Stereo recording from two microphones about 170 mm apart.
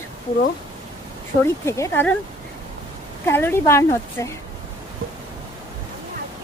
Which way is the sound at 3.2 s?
15° left (ahead or behind).